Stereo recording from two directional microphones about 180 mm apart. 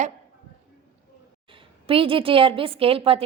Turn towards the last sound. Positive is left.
turn(degrees=-30)  # may be behind; listen again after turning